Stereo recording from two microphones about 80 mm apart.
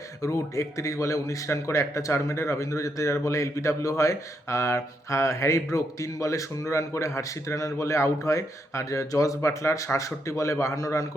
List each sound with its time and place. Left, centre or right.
0.2 s a man's voice: left